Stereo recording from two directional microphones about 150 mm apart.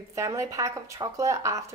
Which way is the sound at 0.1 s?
20° right (ahead or behind).